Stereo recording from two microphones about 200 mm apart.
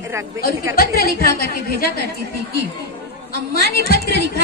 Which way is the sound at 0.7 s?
50° left (ahead or behind).